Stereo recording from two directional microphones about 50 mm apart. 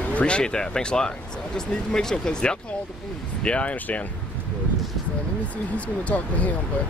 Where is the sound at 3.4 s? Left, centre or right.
Left.